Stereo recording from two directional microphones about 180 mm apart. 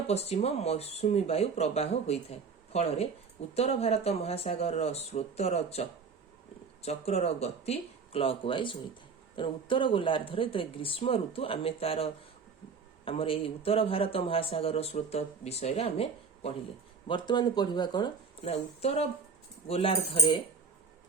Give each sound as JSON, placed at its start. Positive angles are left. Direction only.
{"t": 0.1, "sound": "a man's voice", "side_deg": 35}
{"t": 6.8, "sound": "a man's voice", "side_deg": 35}